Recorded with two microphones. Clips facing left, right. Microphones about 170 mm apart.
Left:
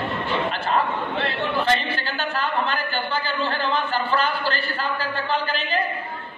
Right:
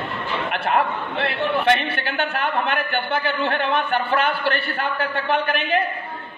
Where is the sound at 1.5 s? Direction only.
65° right (ahead or behind).